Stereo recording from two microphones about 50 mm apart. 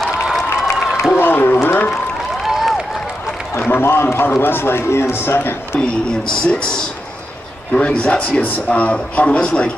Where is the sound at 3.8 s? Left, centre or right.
Left.